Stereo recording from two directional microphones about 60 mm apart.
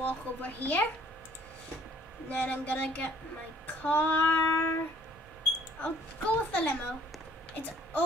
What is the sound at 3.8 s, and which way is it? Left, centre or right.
Female singing, left.